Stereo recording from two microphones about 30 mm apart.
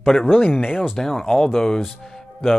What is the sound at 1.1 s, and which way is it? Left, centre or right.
Speech, centre.